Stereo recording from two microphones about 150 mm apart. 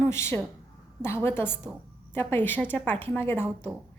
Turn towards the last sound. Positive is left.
turn(degrees=15)  # may be behind; listen again after turning